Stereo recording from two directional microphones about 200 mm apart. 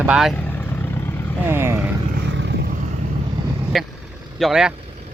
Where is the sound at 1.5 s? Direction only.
10° right (ahead or behind).